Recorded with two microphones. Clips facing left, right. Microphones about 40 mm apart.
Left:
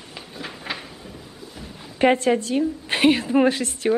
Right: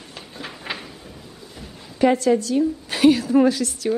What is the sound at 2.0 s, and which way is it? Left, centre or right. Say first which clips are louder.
A woman's voice: right 1 dB; left.